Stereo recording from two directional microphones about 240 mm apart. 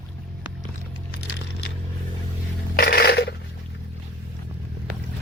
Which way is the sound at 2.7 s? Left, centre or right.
Left.